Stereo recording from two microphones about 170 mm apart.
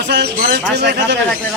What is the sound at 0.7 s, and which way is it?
Speech, 90° right.